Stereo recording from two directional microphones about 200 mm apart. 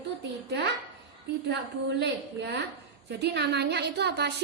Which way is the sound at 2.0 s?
55° right (ahead or behind).